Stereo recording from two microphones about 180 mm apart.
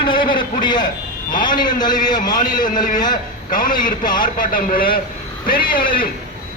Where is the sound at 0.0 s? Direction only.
25° left (ahead or behind).